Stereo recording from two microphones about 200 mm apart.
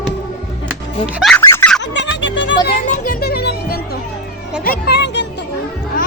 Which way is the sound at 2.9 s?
45° left (ahead or behind).